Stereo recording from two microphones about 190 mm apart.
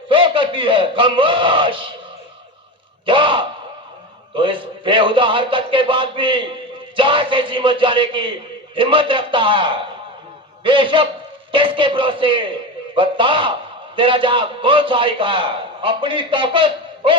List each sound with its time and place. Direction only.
0.1 s a man's voice: 25° right (ahead or behind)
3.1 s a man's voice: 25° right (ahead or behind)